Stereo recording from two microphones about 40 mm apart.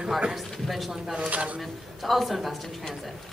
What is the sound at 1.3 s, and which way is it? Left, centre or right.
Speech, right.